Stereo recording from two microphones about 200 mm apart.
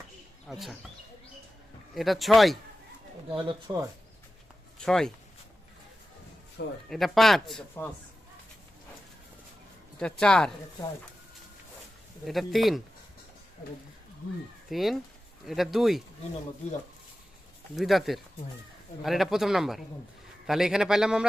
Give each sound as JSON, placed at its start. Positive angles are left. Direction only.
{"t": 0.4, "sound": "speech", "side_deg": 0}
{"t": 2.0, "sound": "speech", "side_deg": 0}
{"t": 3.3, "sound": "speech", "side_deg": -20}
{"t": 4.8, "sound": "speech", "side_deg": 5}
{"t": 6.6, "sound": "speech", "side_deg": 60}
{"t": 6.9, "sound": "speech", "side_deg": 0}
{"t": 10.0, "sound": "speech", "side_deg": 5}
{"t": 12.2, "sound": "speech", "side_deg": 0}
{"t": 14.7, "sound": "speech", "side_deg": 0}
{"t": 16.6, "sound": "speech", "side_deg": 30}
{"t": 17.7, "sound": "speech", "side_deg": 0}